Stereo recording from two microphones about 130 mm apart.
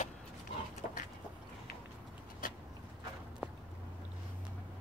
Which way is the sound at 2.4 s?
90° left.